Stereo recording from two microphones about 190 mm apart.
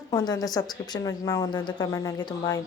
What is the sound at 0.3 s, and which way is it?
Speech, 20° left (ahead or behind).